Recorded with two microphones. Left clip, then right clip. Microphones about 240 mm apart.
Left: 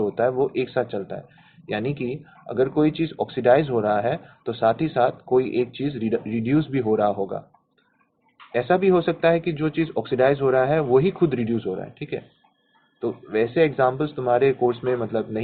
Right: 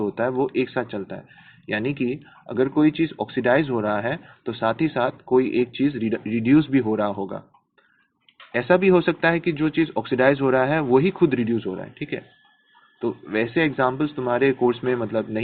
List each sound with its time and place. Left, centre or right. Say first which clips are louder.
0.0 s speech: left 2 dB; right
8.5 s speech: right 1 dB; right